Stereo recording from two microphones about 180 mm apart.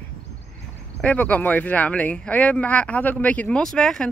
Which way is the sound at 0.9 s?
5° left (ahead or behind).